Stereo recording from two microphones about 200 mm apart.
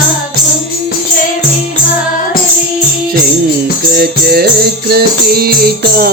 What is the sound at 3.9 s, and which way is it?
Music, 50° right (ahead or behind).